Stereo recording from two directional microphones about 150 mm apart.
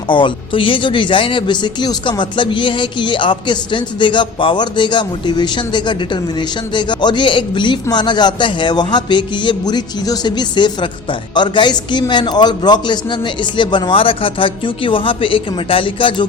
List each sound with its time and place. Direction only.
0.1 s speech: 35° left (ahead or behind)